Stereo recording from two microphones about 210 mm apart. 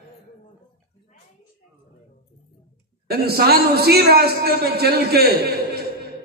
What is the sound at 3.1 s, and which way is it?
A man's voice, 50° right (ahead or behind).